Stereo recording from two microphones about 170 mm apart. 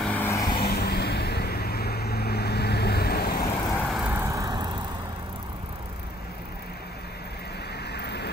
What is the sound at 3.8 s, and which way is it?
Vehicle, 10° right (ahead or behind).